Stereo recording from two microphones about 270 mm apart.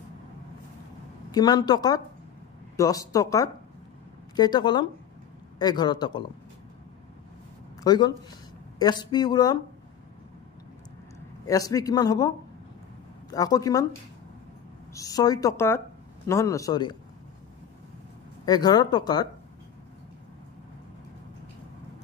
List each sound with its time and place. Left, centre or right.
1.3 s a man's voice: centre
7.8 s speech: centre
11.4 s a man's voice: centre
15.0 s a man's voice: centre
18.4 s a man's voice: centre